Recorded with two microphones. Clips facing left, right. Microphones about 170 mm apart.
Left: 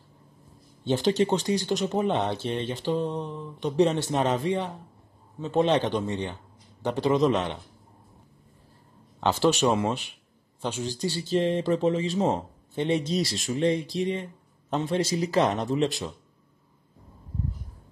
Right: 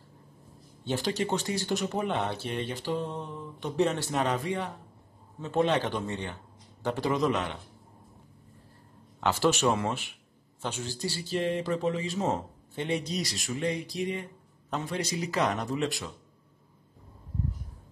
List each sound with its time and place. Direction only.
0.8 s speech: 20° left (ahead or behind)
9.2 s speech: 20° left (ahead or behind)